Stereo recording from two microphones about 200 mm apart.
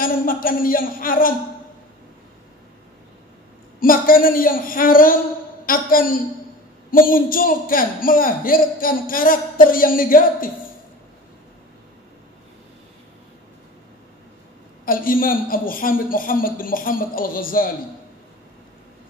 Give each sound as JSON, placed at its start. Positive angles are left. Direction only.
{"t": 0.0, "sound": "speech", "side_deg": 45}
{"t": 3.8, "sound": "a man's voice", "side_deg": 45}
{"t": 14.9, "sound": "a man's voice", "side_deg": 45}